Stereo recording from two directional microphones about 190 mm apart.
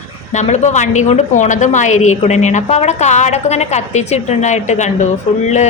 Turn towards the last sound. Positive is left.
turn(degrees=40)  # may be behind; listen again after turning